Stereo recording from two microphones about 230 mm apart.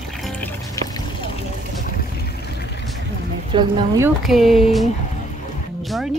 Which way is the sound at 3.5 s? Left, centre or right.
Centre.